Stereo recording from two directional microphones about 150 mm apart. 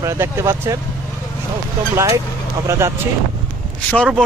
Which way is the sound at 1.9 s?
20° right (ahead or behind).